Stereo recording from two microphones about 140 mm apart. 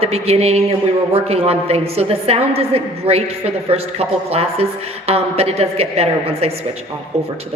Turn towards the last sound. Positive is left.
turn(degrees=-45)  # may be behind; listen again after turning